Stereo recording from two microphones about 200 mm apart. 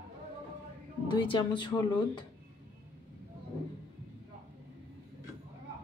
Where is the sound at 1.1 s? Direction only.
25° left (ahead or behind).